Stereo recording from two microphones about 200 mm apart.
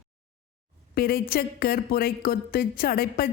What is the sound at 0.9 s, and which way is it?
A woman's voice, 50° left (ahead or behind).